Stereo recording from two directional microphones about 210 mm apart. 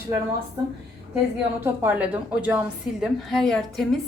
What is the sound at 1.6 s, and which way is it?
A woman's voice, 10° right (ahead or behind).